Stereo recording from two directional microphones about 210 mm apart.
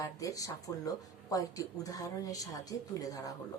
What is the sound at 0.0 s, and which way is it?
A woman's voice, 15° left (ahead or behind).